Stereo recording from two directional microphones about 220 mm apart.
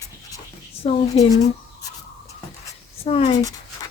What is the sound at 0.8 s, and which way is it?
Speech, 30° left (ahead or behind).